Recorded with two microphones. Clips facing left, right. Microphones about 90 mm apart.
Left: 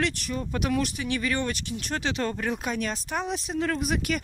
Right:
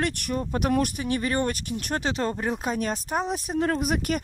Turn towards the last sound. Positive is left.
turn(degrees=-55)  # may be behind; listen again after turning